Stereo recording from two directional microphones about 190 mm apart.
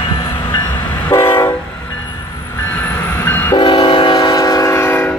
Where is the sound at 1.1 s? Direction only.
15° left (ahead or behind).